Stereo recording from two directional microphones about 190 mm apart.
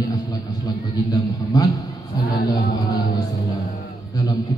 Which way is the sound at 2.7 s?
20° left (ahead or behind).